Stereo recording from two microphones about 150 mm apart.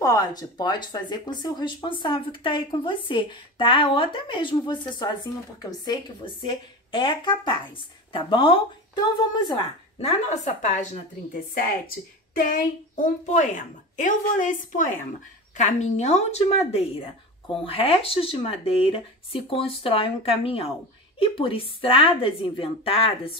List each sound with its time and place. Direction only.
0.0 s speech: 25° left (ahead or behind)
9.9 s a woman's voice: 50° left (ahead or behind)
12.4 s a child's voice: 70° left (ahead or behind)
15.5 s a woman's voice: 50° left (ahead or behind)